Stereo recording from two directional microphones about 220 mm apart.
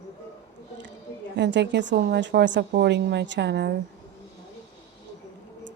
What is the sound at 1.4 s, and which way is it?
Speech, 55° right (ahead or behind).